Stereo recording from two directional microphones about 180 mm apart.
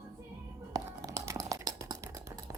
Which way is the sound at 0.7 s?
15° right (ahead or behind).